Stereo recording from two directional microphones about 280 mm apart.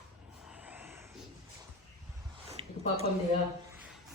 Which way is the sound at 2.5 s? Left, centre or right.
Right.